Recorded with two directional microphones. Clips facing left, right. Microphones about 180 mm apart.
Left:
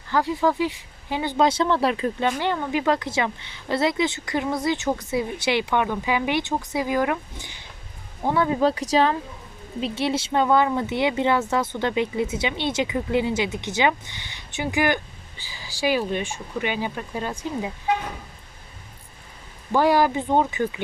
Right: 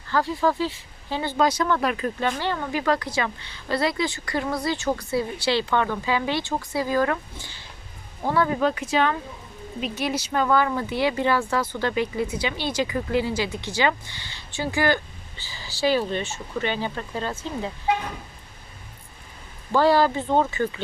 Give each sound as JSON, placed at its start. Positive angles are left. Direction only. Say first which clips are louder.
{"t": 0.1, "sound": "speech", "louder": "left 1 dB", "side_deg": 15}
{"t": 8.6, "sound": "speech", "louder": "left 2 dB", "side_deg": 35}
{"t": 19.7, "sound": "speech", "louder": "even", "side_deg": 15}